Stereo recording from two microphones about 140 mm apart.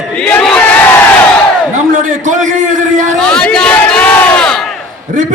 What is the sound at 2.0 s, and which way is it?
A man's voice, 65° right (ahead or behind).